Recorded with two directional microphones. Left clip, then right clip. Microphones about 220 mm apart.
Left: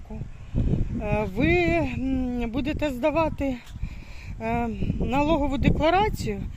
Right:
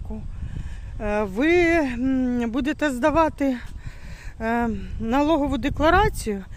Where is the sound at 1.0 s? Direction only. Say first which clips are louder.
Right 4 dB; 25° right (ahead or behind).